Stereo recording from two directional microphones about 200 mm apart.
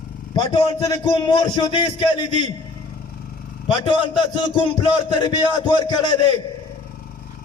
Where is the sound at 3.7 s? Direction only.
25° left (ahead or behind).